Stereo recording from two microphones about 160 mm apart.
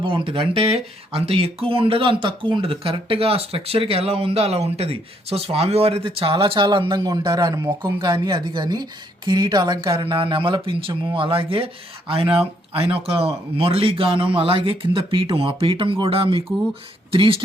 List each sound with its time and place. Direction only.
0.0 s a woman's voice: 35° right (ahead or behind)